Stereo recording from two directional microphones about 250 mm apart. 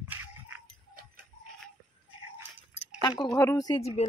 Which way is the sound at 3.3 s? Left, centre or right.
Centre.